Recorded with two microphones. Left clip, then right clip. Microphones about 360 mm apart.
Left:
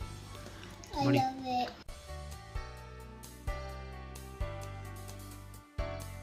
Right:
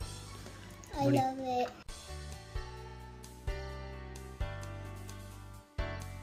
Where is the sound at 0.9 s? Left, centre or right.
Centre.